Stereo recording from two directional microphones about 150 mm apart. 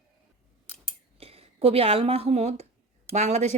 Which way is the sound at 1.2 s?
40° right (ahead or behind).